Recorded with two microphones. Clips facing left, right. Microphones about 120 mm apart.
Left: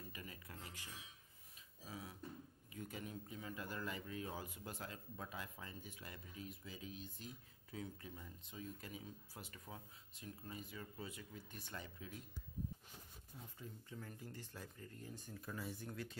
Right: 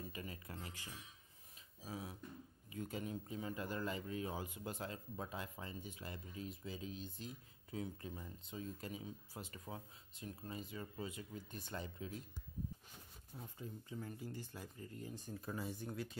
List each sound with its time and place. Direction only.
0.1 s a sound: 30° right (ahead or behind)
1.9 s beatboxing: 25° right (ahead or behind)
2.8 s speech: 25° right (ahead or behind)
13.6 s speech: 20° right (ahead or behind)
14.0 s speech: 10° right (ahead or behind)
15.2 s speech: 25° right (ahead or behind)